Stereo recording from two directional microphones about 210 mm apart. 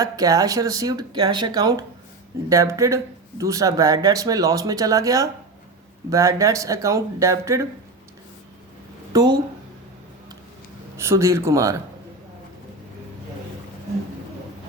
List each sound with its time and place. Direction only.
0.0 s speech: 15° right (ahead or behind)
9.1 s speech: 15° right (ahead or behind)
10.9 s speech: 10° right (ahead or behind)